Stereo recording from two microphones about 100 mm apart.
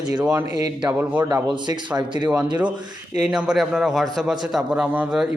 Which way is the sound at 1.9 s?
50° right (ahead or behind).